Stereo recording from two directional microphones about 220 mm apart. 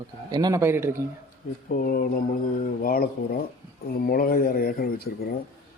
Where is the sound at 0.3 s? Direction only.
20° right (ahead or behind).